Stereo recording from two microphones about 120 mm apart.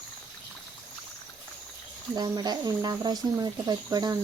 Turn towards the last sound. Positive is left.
turn(degrees=-35)  # may be behind; listen again after turning